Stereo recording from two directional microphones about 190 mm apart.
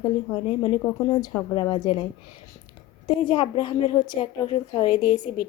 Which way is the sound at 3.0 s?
25° left (ahead or behind).